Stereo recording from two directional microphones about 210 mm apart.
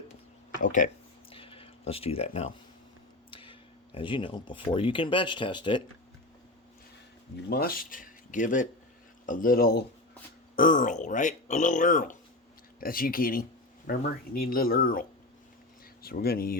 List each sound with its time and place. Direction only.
0.6 s speech: 35° left (ahead or behind)
1.3 s a sound: 25° left (ahead or behind)
1.9 s speech: 30° left (ahead or behind)
7.5 s speech: 45° left (ahead or behind)
16.0 s speech: 45° left (ahead or behind)